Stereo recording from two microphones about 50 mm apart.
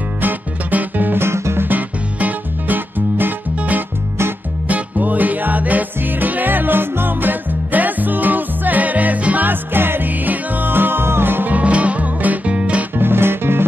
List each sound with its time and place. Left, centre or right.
0.2 s music: right
1.2 s music: right
1.7 s music: right
9.5 s music: right
11.5 s music: right
12.9 s music: right